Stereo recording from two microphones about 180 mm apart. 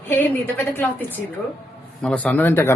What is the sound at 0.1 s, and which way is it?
Speech, 10° left (ahead or behind).